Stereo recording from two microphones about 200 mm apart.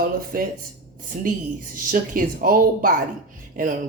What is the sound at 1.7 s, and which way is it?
A woman's voice, 45° right (ahead or behind).